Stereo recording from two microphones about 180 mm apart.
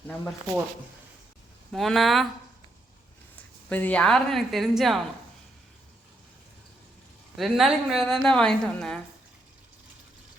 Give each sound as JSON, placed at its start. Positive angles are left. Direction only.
{"t": 1.7, "sound": "a woman's voice", "side_deg": 0}
{"t": 3.7, "sound": "a woman's voice", "side_deg": 10}
{"t": 7.3, "sound": "a woman's voice", "side_deg": 0}